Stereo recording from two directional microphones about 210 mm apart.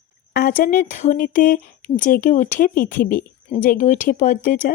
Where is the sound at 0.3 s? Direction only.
40° left (ahead or behind).